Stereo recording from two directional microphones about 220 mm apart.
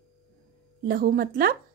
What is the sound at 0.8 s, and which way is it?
Speech, 40° right (ahead or behind).